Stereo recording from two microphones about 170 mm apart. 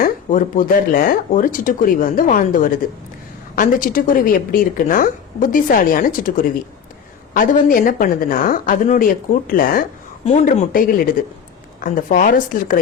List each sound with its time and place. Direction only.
0.0 s a woman's voice: 50° left (ahead or behind)